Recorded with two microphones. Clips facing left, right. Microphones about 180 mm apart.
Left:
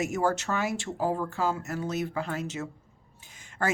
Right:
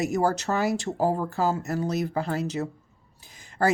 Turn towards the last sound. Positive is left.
turn(degrees=-35)  # may be behind; listen again after turning